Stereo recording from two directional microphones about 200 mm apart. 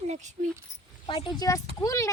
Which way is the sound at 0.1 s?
35° right (ahead or behind).